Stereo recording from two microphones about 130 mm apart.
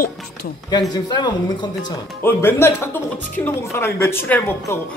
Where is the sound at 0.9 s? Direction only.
30° left (ahead or behind).